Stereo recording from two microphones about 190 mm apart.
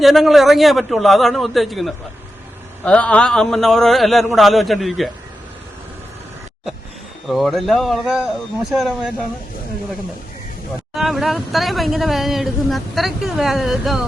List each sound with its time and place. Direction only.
0.0 s speech: centre (ahead or behind)
7.3 s speech: centre (ahead or behind)
10.9 s speech: centre (ahead or behind)